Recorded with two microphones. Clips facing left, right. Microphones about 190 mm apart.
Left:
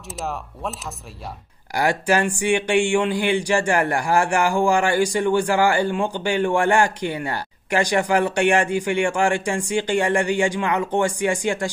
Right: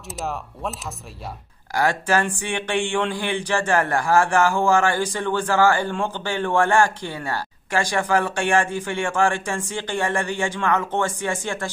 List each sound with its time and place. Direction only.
0.1 s speech: centre (ahead or behind)
1.7 s speech: 15° left (ahead or behind)